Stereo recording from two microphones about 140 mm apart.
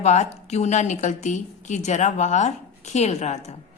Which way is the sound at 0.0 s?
55° left (ahead or behind).